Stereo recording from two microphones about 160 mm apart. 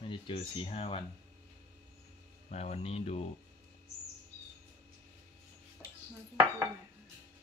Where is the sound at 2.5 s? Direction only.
40° left (ahead or behind).